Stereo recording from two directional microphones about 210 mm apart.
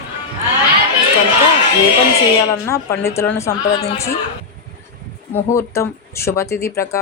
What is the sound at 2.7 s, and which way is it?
Speech, 15° left (ahead or behind).